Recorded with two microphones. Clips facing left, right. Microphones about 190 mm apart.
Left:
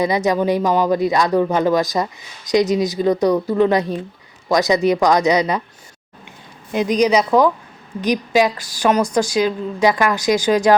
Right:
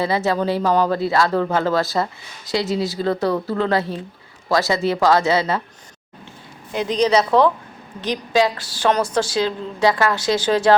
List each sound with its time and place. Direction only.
0.0 s speech: 15° left (ahead or behind)
6.7 s speech: 15° left (ahead or behind)